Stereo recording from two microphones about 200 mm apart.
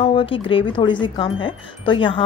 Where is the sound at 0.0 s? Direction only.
25° left (ahead or behind).